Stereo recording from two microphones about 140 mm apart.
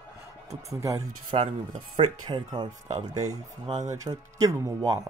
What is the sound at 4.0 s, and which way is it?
Speech, 25° right (ahead or behind).